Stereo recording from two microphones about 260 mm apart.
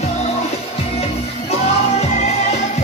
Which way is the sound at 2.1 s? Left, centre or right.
Left.